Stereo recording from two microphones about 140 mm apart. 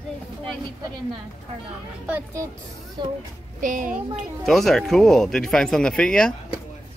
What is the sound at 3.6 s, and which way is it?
Speech, 70° right (ahead or behind).